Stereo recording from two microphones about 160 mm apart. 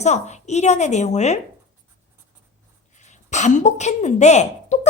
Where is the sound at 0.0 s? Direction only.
45° left (ahead or behind).